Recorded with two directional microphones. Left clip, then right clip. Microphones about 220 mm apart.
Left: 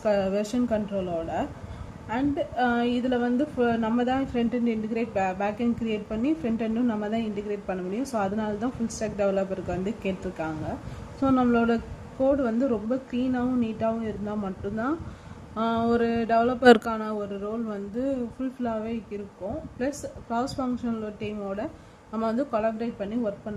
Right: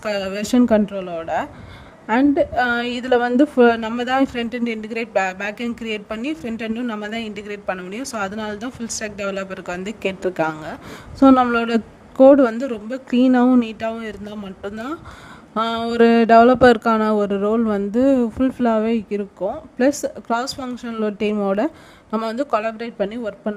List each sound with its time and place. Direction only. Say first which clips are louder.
0.0 s a woman's voice: right 1 dB; 50° right (ahead or behind)
15.5 s a woman's voice: right 6 dB; 45° right (ahead or behind)